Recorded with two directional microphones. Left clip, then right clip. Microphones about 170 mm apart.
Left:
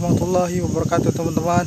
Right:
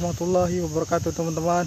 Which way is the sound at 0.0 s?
5° left (ahead or behind).